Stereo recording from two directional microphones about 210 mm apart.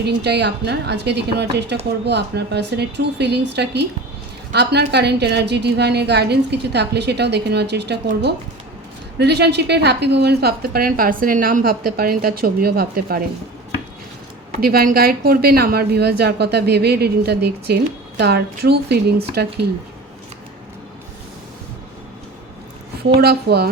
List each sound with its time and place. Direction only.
0.0 s a woman's voice: 50° right (ahead or behind)
9.1 s a woman's voice: 50° right (ahead or behind)
14.6 s a woman's voice: 45° right (ahead or behind)
23.0 s a woman's voice: 50° right (ahead or behind)